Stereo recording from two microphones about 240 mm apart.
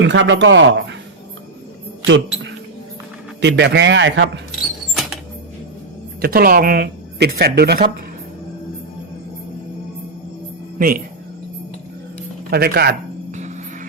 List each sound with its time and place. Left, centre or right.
0.0 s speech: right
2.0 s speech: right
6.2 s speech: right
12.5 s speech: right